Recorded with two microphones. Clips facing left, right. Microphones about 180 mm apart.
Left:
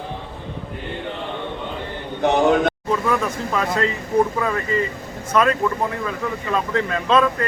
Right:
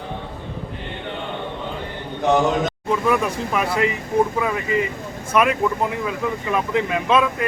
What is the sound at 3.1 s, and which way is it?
Speech, 15° right (ahead or behind).